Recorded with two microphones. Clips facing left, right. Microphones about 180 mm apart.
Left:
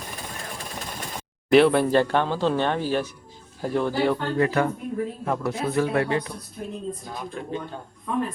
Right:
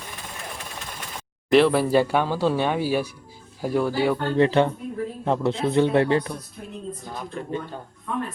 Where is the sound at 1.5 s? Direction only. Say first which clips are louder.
Left 1 dB; centre (ahead or behind).